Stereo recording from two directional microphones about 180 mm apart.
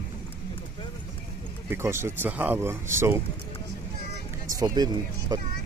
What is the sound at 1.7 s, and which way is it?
Speech, 15° right (ahead or behind).